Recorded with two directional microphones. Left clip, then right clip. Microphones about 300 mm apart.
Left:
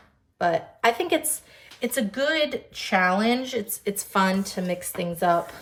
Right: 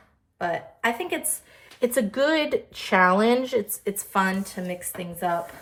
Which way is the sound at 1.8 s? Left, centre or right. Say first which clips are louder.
Right 3 dB; centre.